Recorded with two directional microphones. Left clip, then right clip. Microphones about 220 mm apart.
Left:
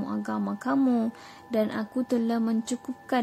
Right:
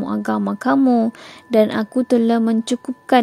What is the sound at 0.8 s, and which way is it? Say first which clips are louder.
Speech: right 9 dB; 25° right (ahead or behind).